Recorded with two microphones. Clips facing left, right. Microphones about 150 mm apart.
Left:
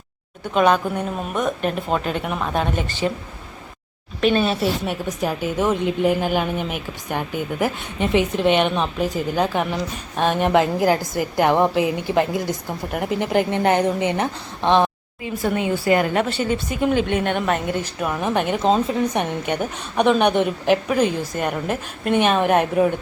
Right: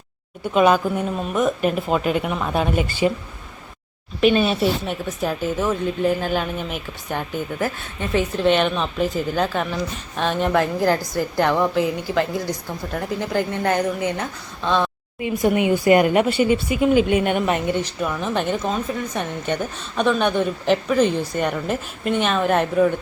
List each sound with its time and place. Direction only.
0.5 s speech: 5° right (ahead or behind)
4.2 s speech: 5° right (ahead or behind)
4.9 s a woman's voice: 10° left (ahead or behind)
15.2 s a woman's voice: 15° right (ahead or behind)
17.7 s a woman's voice: 5° left (ahead or behind)
22.1 s a woman's voice: 55° left (ahead or behind)
22.4 s a woman's voice: 15° left (ahead or behind)